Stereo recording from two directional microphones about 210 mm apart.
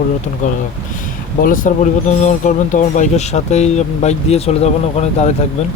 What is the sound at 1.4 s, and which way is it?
Speech, 40° left (ahead or behind).